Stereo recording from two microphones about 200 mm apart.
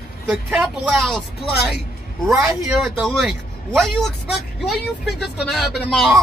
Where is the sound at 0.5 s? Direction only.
Centre (ahead or behind).